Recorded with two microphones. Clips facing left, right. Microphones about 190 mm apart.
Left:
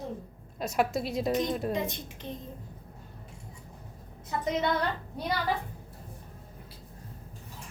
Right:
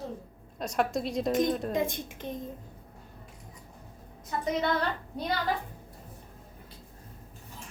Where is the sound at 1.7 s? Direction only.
50° right (ahead or behind).